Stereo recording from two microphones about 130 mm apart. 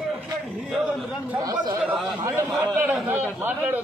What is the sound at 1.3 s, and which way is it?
Speech, 30° right (ahead or behind).